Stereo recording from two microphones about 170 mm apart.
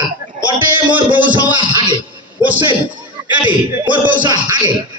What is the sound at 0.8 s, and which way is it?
A man's voice, 25° right (ahead or behind).